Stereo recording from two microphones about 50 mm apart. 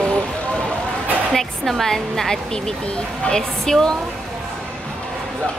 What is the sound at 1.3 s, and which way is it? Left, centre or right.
A woman's voice, centre.